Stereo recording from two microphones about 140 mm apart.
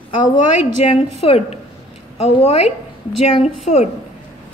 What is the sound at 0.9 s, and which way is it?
A woman's voice, 50° left (ahead or behind).